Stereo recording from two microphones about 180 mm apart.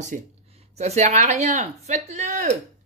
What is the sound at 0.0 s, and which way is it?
Speech, 40° right (ahead or behind).